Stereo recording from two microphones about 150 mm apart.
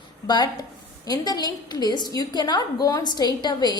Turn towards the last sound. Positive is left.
turn(degrees=30)  # may be behind; listen again after turning